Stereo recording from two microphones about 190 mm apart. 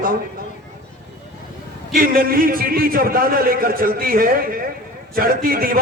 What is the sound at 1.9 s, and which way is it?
A man's voice, 50° right (ahead or behind).